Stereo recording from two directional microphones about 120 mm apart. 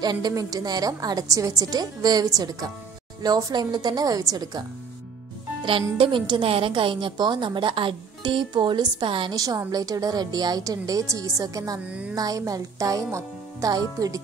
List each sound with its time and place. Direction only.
0.0 s a woman's voice: 35° right (ahead or behind)
5.9 s a woman's voice: 40° right (ahead or behind)
9.3 s a woman's voice: 30° right (ahead or behind)
11.8 s speech: 10° right (ahead or behind)
12.2 s speech: 30° right (ahead or behind)